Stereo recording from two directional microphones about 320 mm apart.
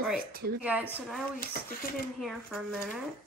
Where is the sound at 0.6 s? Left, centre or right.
Centre.